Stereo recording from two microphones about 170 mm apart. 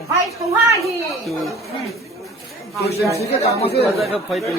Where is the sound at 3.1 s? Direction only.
40° left (ahead or behind).